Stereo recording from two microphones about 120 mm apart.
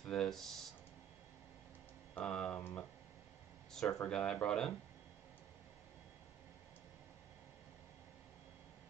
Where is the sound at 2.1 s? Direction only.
5° left (ahead or behind).